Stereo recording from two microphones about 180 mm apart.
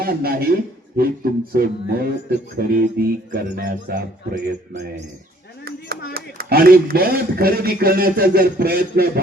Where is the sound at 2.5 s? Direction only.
60° right (ahead or behind).